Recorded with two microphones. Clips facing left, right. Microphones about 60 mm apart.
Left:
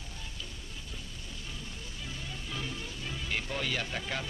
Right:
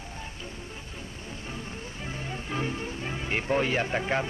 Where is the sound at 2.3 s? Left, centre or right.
Right.